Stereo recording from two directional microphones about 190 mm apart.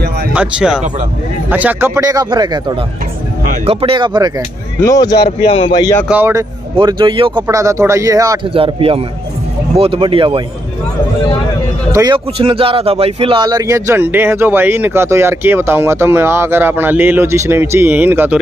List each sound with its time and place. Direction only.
0.3 s speech: 5° right (ahead or behind); by 4.3 s 25° right (ahead or behind)
4.8 s speech: 20° left (ahead or behind)
6.0 s speech: 10° right (ahead or behind)
6.8 s speech: 25° right (ahead or behind)
7.4 s speech: 15° right (ahead or behind)
8.5 s speech: 30° right (ahead or behind)
11.9 s speech: 20° right (ahead or behind)